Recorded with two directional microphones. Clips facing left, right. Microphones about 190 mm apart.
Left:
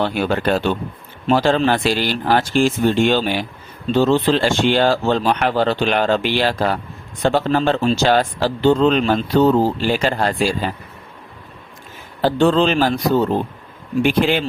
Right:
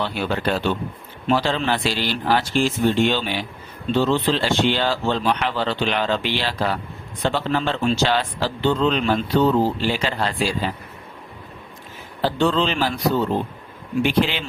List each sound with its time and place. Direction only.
0.0 s speech: 50° left (ahead or behind)
12.2 s speech: 45° left (ahead or behind)